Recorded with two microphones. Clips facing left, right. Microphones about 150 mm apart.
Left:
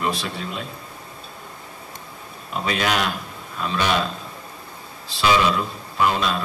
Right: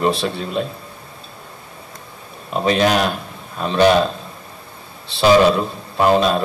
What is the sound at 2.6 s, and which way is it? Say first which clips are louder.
A man's voice: right 7 dB; 30° right (ahead or behind).